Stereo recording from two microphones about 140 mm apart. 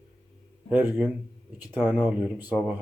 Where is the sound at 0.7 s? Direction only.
15° right (ahead or behind).